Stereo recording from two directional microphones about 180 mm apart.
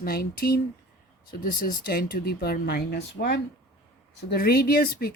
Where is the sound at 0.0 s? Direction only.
55° left (ahead or behind).